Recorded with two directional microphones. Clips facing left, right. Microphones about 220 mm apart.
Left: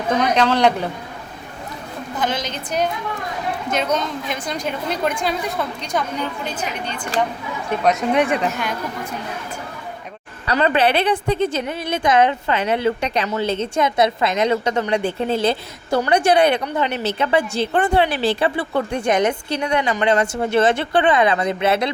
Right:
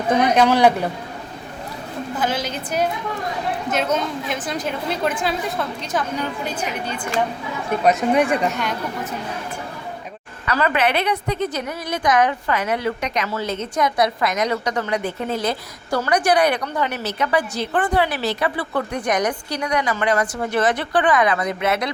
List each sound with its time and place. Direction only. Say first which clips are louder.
0.1 s a man's voice: right 2 dB; 15° right (ahead or behind)
2.1 s a man's voice: even; 5° right (ahead or behind)
10.5 s a woman's voice: left 3 dB; 25° left (ahead or behind)